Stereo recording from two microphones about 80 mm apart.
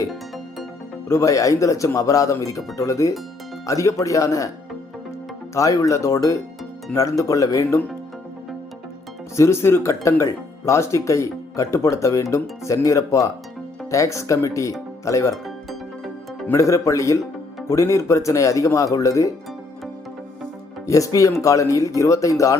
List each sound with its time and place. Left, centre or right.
1.0 s speech: left
5.5 s speech: left
9.3 s speech: left
16.6 s speech: left
20.8 s speech: left